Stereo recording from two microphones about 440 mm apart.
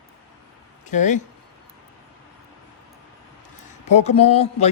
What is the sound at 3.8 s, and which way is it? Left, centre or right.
Speech, centre.